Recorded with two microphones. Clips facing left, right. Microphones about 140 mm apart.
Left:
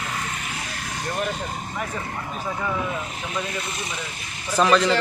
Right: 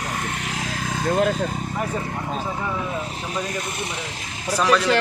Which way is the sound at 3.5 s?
45° right (ahead or behind).